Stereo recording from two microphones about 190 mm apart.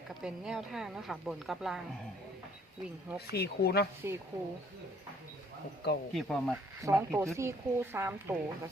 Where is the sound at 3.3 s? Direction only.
55° left (ahead or behind).